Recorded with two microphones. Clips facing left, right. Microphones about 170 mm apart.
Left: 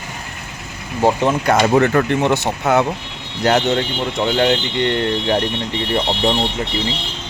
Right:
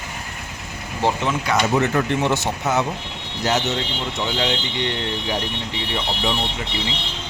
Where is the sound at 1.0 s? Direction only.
50° left (ahead or behind).